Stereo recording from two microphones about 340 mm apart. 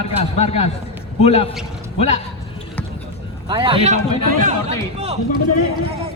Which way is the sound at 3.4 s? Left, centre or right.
Centre.